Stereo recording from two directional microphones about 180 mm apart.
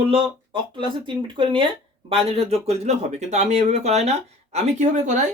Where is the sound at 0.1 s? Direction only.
30° right (ahead or behind).